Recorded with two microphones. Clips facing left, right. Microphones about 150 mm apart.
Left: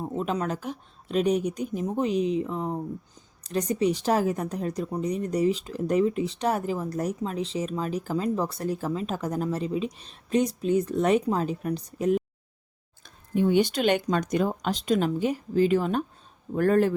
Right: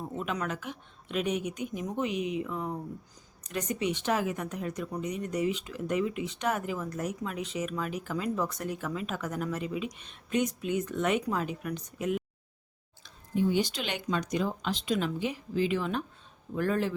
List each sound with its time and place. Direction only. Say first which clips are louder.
0.0 s a woman's voice: left 5 dB; 35° left (ahead or behind)
13.0 s speech: left 4 dB; 60° left (ahead or behind)